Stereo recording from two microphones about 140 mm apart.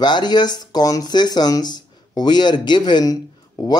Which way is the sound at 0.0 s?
30° left (ahead or behind).